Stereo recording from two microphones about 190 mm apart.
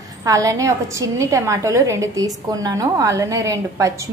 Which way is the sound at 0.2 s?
15° right (ahead or behind).